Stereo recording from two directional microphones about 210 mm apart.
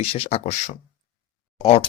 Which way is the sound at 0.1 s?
30° left (ahead or behind).